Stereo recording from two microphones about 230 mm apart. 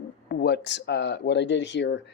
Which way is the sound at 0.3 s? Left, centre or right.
Left.